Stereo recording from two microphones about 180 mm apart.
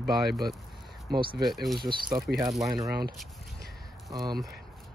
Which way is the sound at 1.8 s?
25° right (ahead or behind).